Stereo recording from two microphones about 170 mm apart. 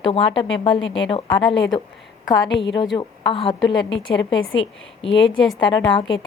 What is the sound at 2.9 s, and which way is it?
Speech, 30° left (ahead or behind).